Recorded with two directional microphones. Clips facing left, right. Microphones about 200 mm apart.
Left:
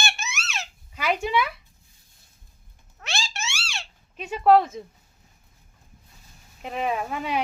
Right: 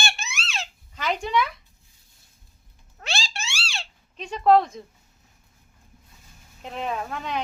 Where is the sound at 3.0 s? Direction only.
30° right (ahead or behind).